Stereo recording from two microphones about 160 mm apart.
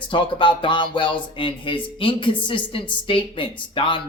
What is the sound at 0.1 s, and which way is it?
Speech, 30° left (ahead or behind).